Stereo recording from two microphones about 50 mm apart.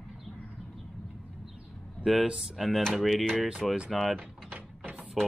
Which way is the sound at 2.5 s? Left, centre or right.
Centre.